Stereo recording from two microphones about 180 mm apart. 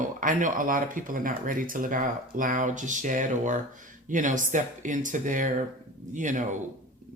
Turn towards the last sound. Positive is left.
turn(degrees=-45)  # may be behind; listen again after turning